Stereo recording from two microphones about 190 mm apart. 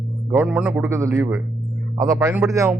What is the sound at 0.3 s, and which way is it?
Speech, 10° right (ahead or behind).